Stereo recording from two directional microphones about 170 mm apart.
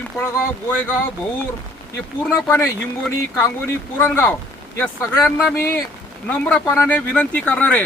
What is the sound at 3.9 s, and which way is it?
Speech, 15° left (ahead or behind).